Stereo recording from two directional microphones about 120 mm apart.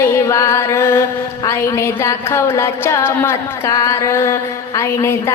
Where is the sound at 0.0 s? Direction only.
25° left (ahead or behind).